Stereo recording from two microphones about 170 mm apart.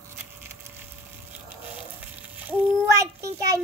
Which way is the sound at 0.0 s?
15° right (ahead or behind).